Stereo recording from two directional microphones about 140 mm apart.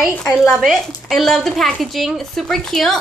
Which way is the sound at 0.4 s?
Centre (ahead or behind).